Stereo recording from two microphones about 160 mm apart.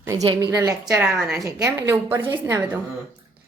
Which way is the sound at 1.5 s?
20° right (ahead or behind).